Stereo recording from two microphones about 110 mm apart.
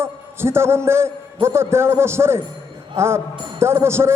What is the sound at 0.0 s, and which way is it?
A man's voice, 25° right (ahead or behind).